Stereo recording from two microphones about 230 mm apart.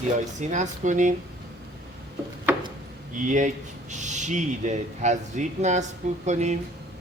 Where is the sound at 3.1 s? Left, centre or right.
Right.